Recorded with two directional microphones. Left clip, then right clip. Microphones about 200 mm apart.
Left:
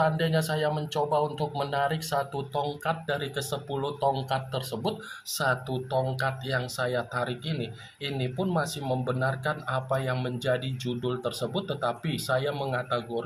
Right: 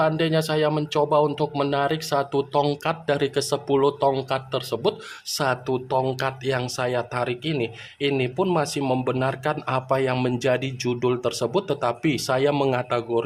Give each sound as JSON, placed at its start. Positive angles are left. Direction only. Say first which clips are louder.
{"t": 0.0, "sound": "speech", "louder": "right 5 dB", "side_deg": -45}